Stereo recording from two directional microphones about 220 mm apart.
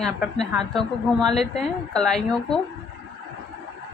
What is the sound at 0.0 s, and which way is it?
A woman's voice, centre (ahead or behind).